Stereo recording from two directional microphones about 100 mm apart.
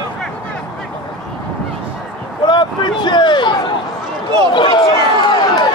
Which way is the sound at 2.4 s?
50° left (ahead or behind).